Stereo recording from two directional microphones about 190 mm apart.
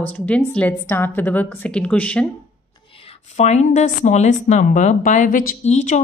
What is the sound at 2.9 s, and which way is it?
A woman's voice, 30° left (ahead or behind).